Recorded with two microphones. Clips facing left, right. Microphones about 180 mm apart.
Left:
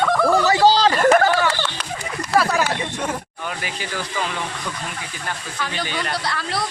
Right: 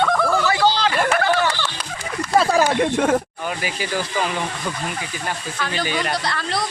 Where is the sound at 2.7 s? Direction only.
55° right (ahead or behind).